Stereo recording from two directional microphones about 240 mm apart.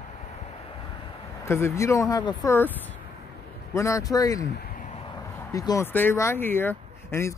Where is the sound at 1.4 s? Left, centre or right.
Centre.